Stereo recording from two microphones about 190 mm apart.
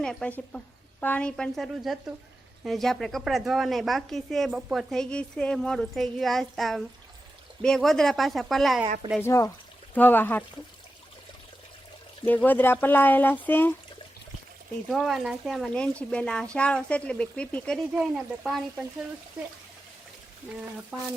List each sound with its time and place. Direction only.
0.0 s speech: 5° left (ahead or behind)
9.2 s speech: 15° left (ahead or behind)
12.2 s speech: 10° left (ahead or behind)
14.8 s speech: centre (ahead or behind)
20.9 s speech: 5° right (ahead or behind)